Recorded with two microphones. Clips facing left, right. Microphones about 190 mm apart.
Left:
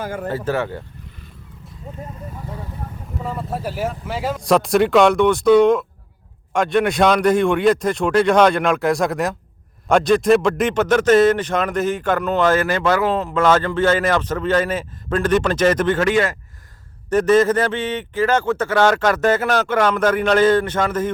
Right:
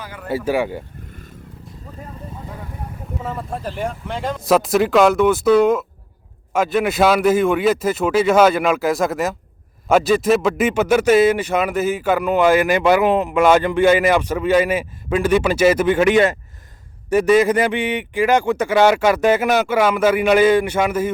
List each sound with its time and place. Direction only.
0.0 s speech: 45° left (ahead or behind)
0.3 s a man's voice: 10° right (ahead or behind)
3.2 s a man's voice: centre (ahead or behind)